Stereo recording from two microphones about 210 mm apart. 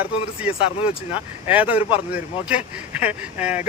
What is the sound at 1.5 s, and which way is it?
Speech, 5° right (ahead or behind).